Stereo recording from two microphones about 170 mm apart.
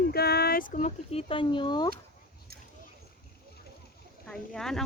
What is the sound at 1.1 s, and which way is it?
Speech, 35° left (ahead or behind).